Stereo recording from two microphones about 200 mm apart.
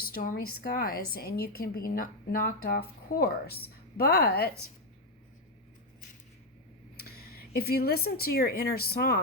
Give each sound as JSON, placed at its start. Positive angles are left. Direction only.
{"t": 0.1, "sound": "a woman's voice", "side_deg": 45}
{"t": 7.0, "sound": "speech", "side_deg": 50}